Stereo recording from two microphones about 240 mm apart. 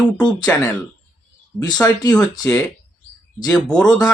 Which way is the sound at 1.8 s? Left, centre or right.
Centre.